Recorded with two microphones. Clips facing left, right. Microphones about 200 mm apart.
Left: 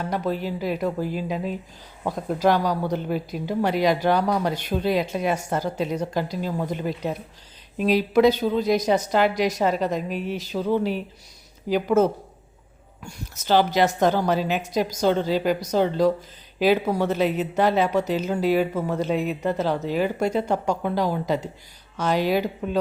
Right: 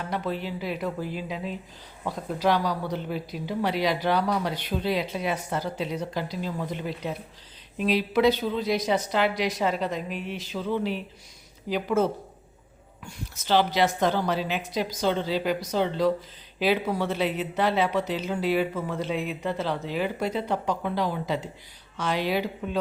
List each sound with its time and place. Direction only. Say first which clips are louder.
0.1 s a woman's voice: left 3 dB; 45° left (ahead or behind)